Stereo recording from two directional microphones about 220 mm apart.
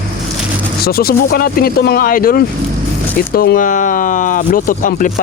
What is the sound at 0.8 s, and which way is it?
Speech, 45° left (ahead or behind).